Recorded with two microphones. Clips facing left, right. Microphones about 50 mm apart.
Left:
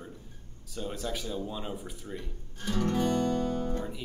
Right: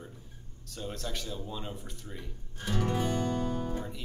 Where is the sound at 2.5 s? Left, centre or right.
Centre.